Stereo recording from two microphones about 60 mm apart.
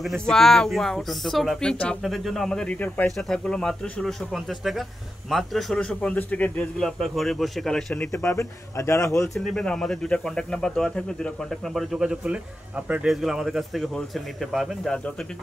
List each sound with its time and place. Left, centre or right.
0.2 s speech: centre
2.0 s speech: centre
4.3 s speech: centre
5.8 s speech: left
6.8 s speech: centre
8.4 s speech: left
9.3 s speech: centre
11.7 s speech: centre
12.2 s speech: right
13.0 s speech: centre